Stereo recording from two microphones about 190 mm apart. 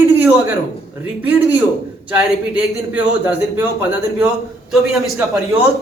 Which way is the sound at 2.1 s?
5° right (ahead or behind).